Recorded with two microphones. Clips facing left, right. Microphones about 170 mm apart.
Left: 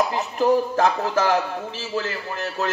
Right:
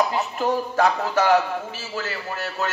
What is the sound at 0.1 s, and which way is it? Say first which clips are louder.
Speech: left 4 dB; 35° left (ahead or behind).